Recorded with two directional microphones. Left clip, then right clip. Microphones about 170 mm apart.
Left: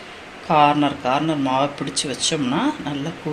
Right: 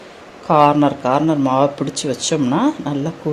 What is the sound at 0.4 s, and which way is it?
Speech, 55° right (ahead or behind).